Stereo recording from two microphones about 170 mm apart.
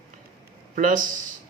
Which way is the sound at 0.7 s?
55° right (ahead or behind).